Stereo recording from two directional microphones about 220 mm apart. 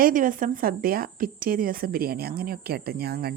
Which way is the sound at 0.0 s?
40° right (ahead or behind).